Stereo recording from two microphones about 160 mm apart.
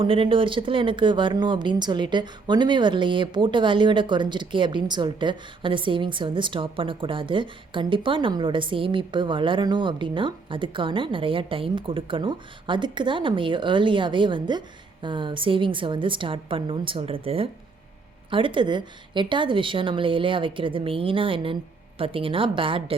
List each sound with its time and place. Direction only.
0.0 s speech: 35° right (ahead or behind)